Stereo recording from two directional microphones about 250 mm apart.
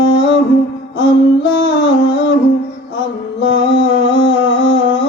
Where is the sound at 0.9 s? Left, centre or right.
Left.